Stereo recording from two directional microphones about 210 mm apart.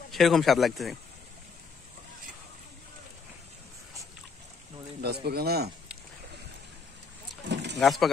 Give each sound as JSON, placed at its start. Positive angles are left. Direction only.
{"t": 0.1, "sound": "speech", "side_deg": 0}
{"t": 5.0, "sound": "a man's voice", "side_deg": -50}
{"t": 7.4, "sound": "vehicle", "side_deg": -55}
{"t": 7.8, "sound": "speech", "side_deg": 0}